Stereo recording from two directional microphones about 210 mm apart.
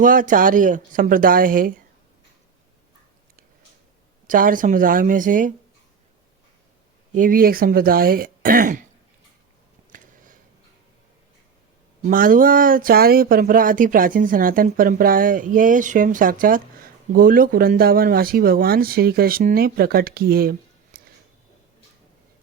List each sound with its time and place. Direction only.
0.0 s speech: 40° right (ahead or behind)
4.3 s speech: 40° right (ahead or behind)
7.2 s speech: 45° right (ahead or behind)
12.0 s speech: 40° right (ahead or behind)